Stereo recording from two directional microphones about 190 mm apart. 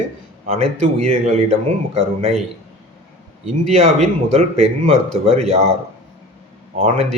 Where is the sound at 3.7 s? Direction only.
35° right (ahead or behind).